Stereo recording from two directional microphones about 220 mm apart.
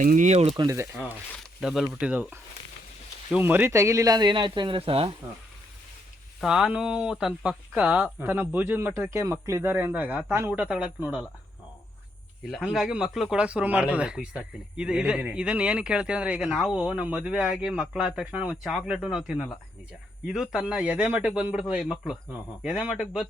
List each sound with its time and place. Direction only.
0.0 s speech: 35° right (ahead or behind)
0.5 s speech: 15° right (ahead or behind)
1.3 s speech: centre (ahead or behind); by 5.1 s 25° right (ahead or behind)
6.4 s speech: centre (ahead or behind)
12.5 s speech: centre (ahead or behind)